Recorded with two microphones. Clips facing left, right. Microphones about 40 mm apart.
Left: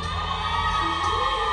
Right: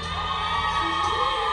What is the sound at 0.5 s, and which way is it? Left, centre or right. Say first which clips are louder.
Music: left 1 dB; centre.